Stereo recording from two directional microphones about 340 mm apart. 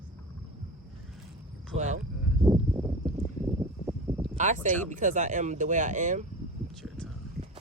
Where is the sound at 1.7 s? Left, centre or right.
Right.